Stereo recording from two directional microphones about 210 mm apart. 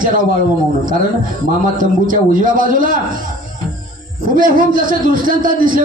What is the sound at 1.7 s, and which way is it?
A man's voice, 40° right (ahead or behind).